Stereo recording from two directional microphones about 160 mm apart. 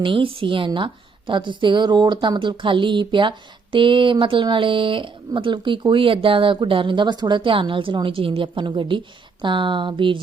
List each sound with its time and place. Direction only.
0.0 s speech: 30° right (ahead or behind)